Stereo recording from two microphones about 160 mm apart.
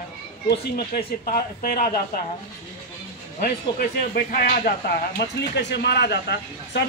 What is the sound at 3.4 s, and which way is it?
Speech, 70° left (ahead or behind).